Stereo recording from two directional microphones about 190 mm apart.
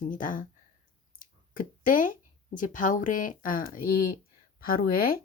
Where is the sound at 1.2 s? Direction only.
45° left (ahead or behind).